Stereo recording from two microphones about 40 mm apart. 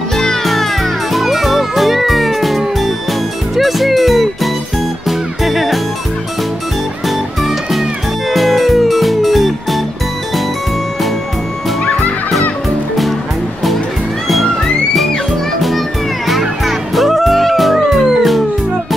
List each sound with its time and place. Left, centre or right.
0.1 s music: centre
1.1 s music: centre
7.1 s music: centre
14.2 s music: centre
16.3 s music: centre